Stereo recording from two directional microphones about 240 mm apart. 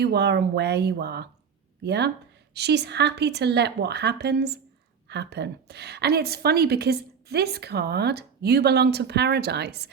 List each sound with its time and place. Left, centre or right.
0.0 s a woman's voice: right